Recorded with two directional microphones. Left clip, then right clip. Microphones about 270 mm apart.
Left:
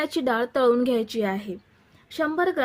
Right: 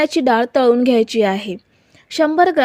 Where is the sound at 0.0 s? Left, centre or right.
Right.